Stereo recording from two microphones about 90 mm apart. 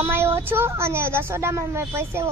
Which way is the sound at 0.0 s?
30° right (ahead or behind).